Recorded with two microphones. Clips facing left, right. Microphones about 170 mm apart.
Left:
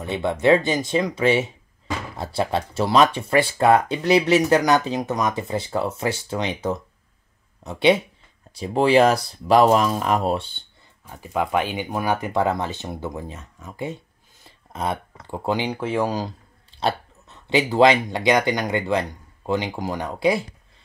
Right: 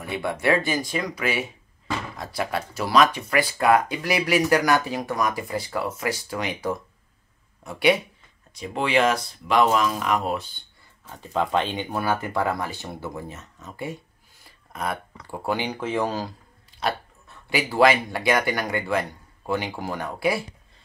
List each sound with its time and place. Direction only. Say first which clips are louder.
0.0 s speech: left 5 dB; 20° left (ahead or behind)
11.1 s speech: left 1 dB; 10° left (ahead or behind)